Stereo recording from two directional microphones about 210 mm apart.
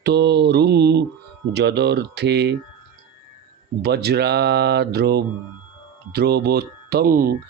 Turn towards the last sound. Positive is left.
turn(degrees=-45)  # may be behind; listen again after turning